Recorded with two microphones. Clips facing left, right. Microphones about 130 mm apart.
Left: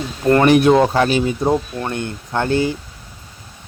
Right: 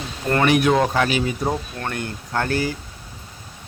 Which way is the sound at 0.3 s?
35° left (ahead or behind).